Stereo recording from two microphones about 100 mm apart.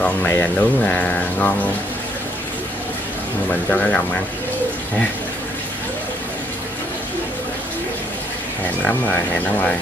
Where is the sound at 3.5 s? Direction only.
15° left (ahead or behind).